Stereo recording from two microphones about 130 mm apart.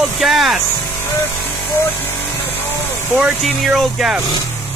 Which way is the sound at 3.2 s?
Centre (ahead or behind).